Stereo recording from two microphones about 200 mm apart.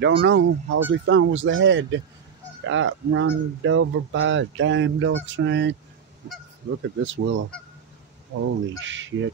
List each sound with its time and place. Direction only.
0.0 s speech: 70° right (ahead or behind)
7.0 s speech: 70° right (ahead or behind)
8.7 s speech: 70° right (ahead or behind)